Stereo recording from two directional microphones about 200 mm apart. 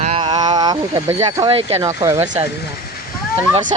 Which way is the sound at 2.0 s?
15° right (ahead or behind).